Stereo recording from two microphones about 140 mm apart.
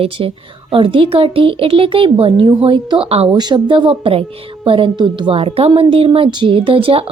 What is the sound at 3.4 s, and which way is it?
A woman's voice, 35° right (ahead or behind).